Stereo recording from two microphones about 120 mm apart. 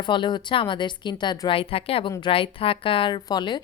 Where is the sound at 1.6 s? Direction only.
50° left (ahead or behind).